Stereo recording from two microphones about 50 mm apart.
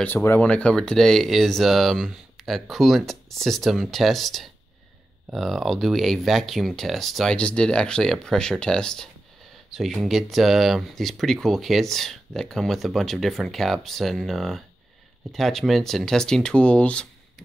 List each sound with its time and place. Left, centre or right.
0.4 s speech: left
0.7 s speech: centre
2.4 s a sound: centre
2.7 s speech: centre
7.3 s speech: left
9.7 s a sound: centre
10.0 s speech: centre; by 17.1 s left